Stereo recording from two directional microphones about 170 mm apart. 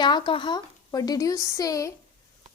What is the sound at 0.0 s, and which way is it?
A woman's voice, 30° left (ahead or behind).